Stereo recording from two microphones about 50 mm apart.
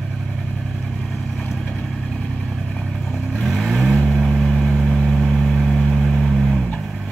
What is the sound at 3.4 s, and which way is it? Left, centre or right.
Vehicle, centre.